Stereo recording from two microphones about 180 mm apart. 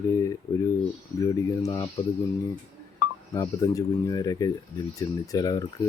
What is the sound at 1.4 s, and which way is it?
Speech, 20° left (ahead or behind).